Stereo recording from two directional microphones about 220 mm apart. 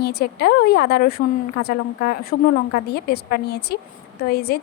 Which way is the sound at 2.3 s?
45° left (ahead or behind).